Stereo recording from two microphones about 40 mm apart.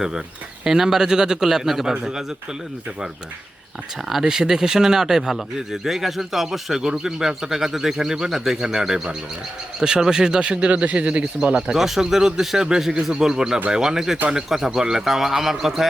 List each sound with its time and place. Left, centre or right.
0.6 s speech: centre
4.1 s a man's voice: centre; by 11.3 s right
11.5 s speech: centre